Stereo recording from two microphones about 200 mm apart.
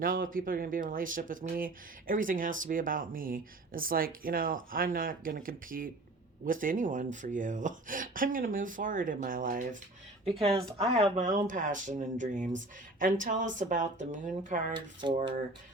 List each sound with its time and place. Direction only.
0.0 s speech: 45° right (ahead or behind)
10.3 s speech: 30° right (ahead or behind)